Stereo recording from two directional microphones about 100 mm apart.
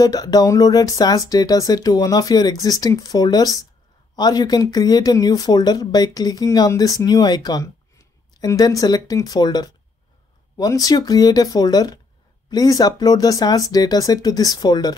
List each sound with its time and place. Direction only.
0.0 s speech: 40° left (ahead or behind)
10.7 s speech: 40° left (ahead or behind)